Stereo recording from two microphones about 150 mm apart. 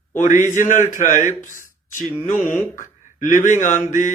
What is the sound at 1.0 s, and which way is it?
Speech, 60° left (ahead or behind).